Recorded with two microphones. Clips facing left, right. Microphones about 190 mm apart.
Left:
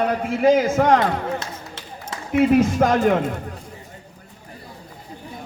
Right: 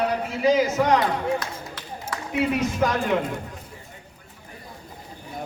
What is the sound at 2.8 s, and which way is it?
Speech, 50° left (ahead or behind).